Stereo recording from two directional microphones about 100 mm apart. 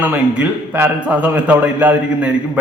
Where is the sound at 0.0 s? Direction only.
15° right (ahead or behind).